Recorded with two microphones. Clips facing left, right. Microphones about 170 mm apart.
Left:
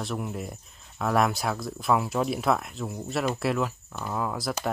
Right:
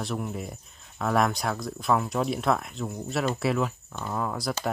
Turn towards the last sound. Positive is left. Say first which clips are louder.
# even
turn(degrees=0)  # may be behind; listen again after turning